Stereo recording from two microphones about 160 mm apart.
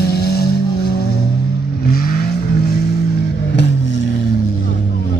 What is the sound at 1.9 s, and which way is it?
Vehicle, 65° left (ahead or behind).